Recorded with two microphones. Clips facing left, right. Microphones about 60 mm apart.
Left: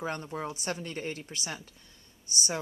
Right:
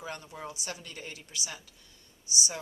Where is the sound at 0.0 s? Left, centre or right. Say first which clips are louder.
Left 6 dB; left.